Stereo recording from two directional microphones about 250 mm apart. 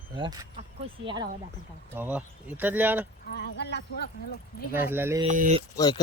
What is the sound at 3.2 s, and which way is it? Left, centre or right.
Speech, left.